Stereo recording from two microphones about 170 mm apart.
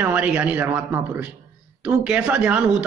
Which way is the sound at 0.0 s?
10° right (ahead or behind).